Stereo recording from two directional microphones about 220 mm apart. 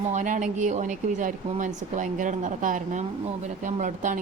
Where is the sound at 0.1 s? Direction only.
35° right (ahead or behind).